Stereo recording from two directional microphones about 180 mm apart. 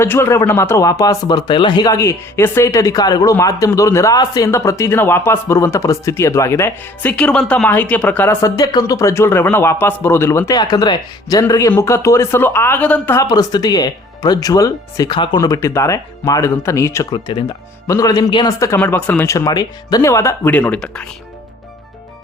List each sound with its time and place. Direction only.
0.0 s speech: 15° left (ahead or behind)
18.8 s speech: 10° left (ahead or behind)